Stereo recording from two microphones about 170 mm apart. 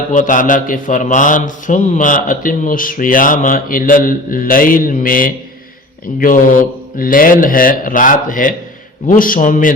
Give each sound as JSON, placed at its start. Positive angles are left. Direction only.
{"t": 0.1, "sound": "a man's voice", "side_deg": 50}